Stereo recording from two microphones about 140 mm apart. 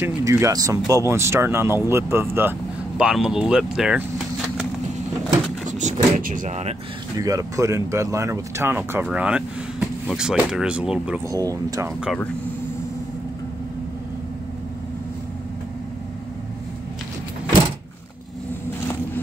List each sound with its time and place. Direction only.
0.0 s speech: 20° right (ahead or behind)
3.0 s speech: 5° right (ahead or behind)
5.7 s speech: 60° right (ahead or behind)
7.2 s speech: 25° right (ahead or behind); by 11.2 s 5° right (ahead or behind)
11.2 s speech: 25° right (ahead or behind)